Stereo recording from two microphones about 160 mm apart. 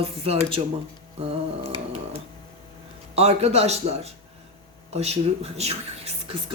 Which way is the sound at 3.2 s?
40° right (ahead or behind).